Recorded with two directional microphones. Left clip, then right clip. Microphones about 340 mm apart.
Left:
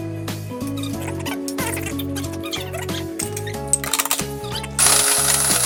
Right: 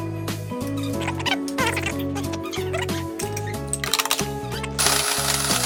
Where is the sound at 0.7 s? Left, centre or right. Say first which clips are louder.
Right 2 dB; centre.